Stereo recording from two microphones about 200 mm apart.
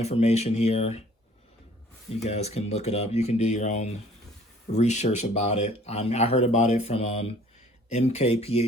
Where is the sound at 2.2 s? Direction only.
30° left (ahead or behind).